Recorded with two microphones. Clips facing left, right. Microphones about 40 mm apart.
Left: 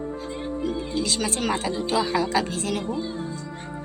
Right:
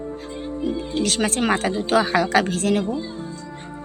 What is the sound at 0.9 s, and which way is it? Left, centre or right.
Speech, right.